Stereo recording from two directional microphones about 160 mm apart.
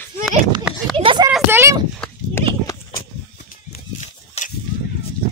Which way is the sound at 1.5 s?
15° right (ahead or behind).